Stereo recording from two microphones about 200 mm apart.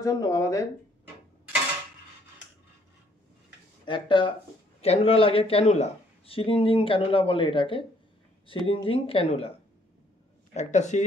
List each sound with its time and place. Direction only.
0.0 s speech: 20° left (ahead or behind)
3.8 s speech: 25° left (ahead or behind)
10.5 s speech: 35° left (ahead or behind)